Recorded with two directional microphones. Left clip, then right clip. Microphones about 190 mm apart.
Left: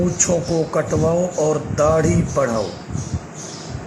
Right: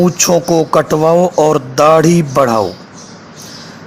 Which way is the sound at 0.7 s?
35° right (ahead or behind).